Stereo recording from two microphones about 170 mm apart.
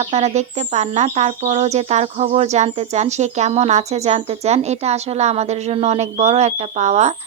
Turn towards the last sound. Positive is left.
turn(degrees=-40)  # may be behind; listen again after turning